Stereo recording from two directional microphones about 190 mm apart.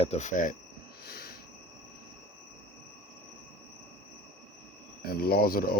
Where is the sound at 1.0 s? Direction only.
55° left (ahead or behind).